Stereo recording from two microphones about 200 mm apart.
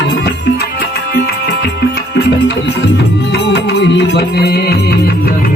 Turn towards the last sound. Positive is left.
turn(degrees=50)  # may be behind; listen again after turning